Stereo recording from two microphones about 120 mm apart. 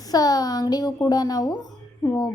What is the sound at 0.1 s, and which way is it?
Speech, 35° left (ahead or behind).